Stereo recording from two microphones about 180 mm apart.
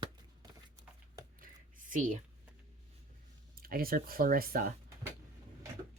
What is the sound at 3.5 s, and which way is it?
Speech, 55° right (ahead or behind).